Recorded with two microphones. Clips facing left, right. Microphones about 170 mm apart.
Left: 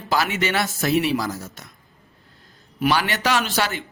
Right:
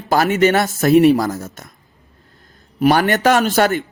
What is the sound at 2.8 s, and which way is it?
Speech, 45° right (ahead or behind).